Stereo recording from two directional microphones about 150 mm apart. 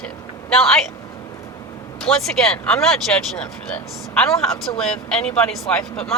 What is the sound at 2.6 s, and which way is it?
Speech, 15° left (ahead or behind).